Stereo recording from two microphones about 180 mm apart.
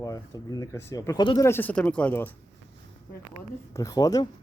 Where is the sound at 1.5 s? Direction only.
10° left (ahead or behind).